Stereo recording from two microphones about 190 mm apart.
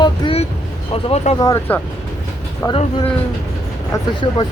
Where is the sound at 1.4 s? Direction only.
15° left (ahead or behind).